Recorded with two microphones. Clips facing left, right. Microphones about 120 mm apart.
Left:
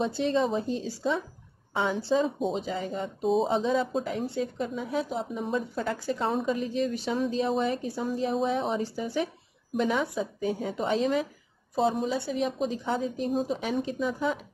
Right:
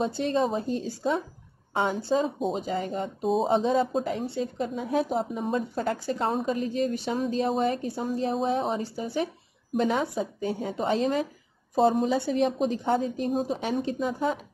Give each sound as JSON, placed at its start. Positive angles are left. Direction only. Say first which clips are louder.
{"t": 0.2, "sound": "a woman's voice", "louder": "left 1 dB", "side_deg": -50}
{"t": 3.2, "sound": "speech", "louder": "left 1 dB", "side_deg": 0}
{"t": 3.4, "sound": "a woman's voice", "louder": "right 3 dB", "side_deg": -50}